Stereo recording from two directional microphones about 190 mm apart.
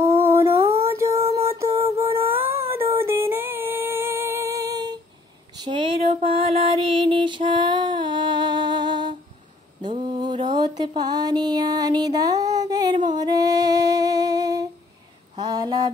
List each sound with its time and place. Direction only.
0.3 s a sound: 15° right (ahead or behind)
2.2 s music: 10° right (ahead or behind)
9.9 s mantra: 25° right (ahead or behind)
11.0 s music: 20° right (ahead or behind)
13.2 s humming: 20° right (ahead or behind)
15.3 s a sound: 20° right (ahead or behind)